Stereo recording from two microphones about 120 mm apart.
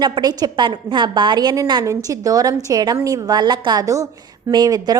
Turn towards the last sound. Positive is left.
turn(degrees=-30)  # may be behind; listen again after turning